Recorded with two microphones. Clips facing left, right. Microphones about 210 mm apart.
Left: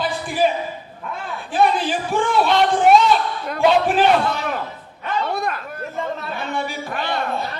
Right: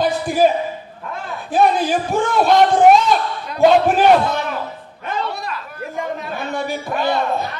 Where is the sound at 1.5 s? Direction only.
40° right (ahead or behind).